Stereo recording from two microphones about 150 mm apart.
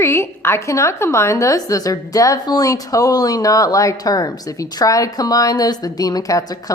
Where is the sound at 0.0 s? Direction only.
15° left (ahead or behind).